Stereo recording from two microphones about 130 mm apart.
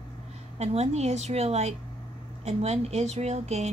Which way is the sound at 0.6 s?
55° right (ahead or behind).